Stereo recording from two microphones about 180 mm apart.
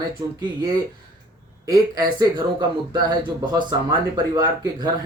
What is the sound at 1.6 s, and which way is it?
Speech, 20° right (ahead or behind).